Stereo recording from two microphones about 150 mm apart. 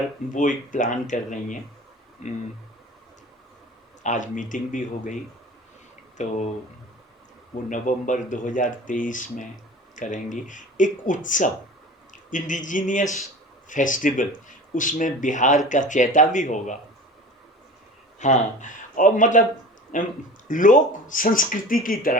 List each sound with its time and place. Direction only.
0.3 s speech: 60° left (ahead or behind)
4.0 s speech: 55° left (ahead or behind)
6.1 s speech: 50° left (ahead or behind)
7.7 s speech: 60° left (ahead or behind)
18.2 s speech: 55° left (ahead or behind)